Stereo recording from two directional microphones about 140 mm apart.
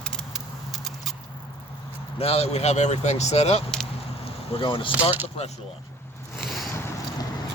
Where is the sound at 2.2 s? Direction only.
45° left (ahead or behind).